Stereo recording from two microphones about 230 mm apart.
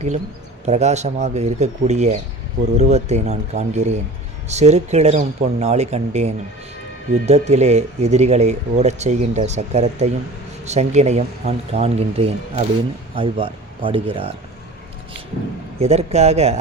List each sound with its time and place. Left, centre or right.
0.6 s speech: right
15.8 s speech: right